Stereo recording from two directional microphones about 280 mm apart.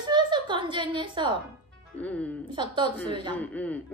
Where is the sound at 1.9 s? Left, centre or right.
Centre.